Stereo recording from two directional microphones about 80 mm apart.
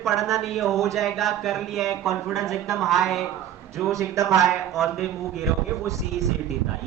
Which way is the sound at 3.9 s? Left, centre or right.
Right.